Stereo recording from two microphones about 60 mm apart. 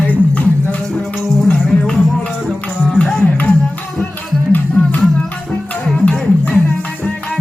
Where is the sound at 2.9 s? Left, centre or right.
Centre.